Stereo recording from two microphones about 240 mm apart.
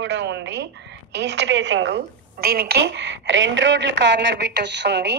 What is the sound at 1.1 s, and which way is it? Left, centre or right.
A woman's voice, right.